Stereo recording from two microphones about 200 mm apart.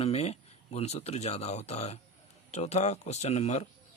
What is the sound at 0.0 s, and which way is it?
Speech, 30° left (ahead or behind).